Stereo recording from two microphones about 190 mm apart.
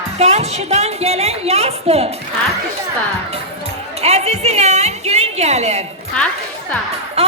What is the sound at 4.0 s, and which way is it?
A woman's voice, 35° right (ahead or behind).